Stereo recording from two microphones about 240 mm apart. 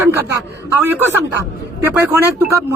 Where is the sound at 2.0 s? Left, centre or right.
Centre.